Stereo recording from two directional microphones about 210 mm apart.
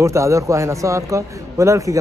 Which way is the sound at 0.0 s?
15° right (ahead or behind).